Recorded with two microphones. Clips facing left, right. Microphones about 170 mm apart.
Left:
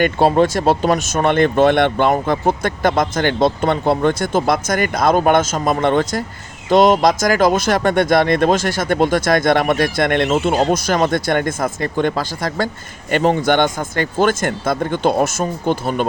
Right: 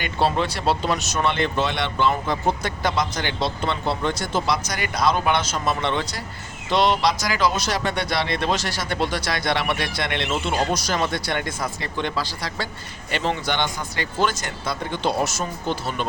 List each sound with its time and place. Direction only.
0.0 s speech: 45° left (ahead or behind)